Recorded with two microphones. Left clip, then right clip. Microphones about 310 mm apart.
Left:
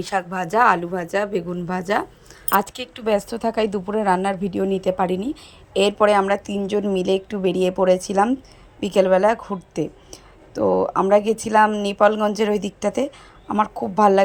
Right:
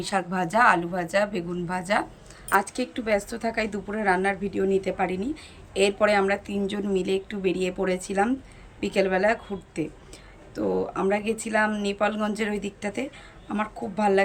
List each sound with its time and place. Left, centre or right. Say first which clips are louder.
0.0 s a woman's voice: left 3 dB; centre